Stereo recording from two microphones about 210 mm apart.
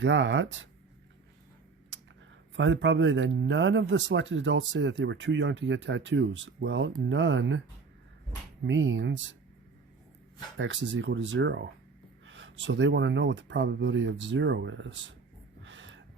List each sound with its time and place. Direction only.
0.0 s speech: 60° right (ahead or behind)
2.6 s speech: 60° right (ahead or behind)
8.6 s speech: 65° right (ahead or behind)
10.6 s speech: 60° right (ahead or behind)
15.6 s a sound: 65° right (ahead or behind)